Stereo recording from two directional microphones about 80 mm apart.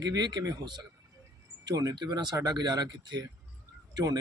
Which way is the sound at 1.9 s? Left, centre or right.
Right.